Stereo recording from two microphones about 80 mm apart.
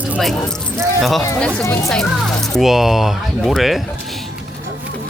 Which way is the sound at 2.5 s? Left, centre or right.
Centre.